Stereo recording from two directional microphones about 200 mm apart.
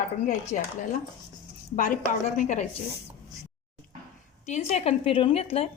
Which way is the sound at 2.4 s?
35° left (ahead or behind).